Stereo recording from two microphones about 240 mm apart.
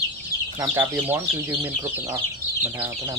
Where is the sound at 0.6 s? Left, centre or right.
Centre.